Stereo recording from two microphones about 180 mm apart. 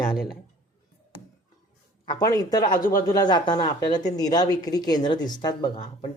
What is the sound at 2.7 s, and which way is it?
Speech, 50° left (ahead or behind).